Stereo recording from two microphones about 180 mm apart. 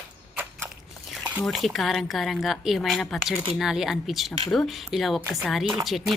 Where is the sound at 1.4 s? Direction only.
Centre (ahead or behind).